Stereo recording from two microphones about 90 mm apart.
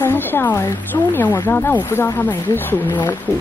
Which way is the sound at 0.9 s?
45° left (ahead or behind).